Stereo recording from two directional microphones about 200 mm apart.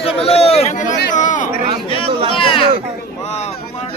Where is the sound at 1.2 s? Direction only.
40° left (ahead or behind).